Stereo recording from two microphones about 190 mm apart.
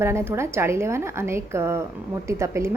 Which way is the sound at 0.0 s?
15° right (ahead or behind).